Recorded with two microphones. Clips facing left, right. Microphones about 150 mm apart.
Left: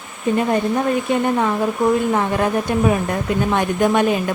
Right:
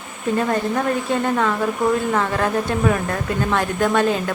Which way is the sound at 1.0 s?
15° left (ahead or behind).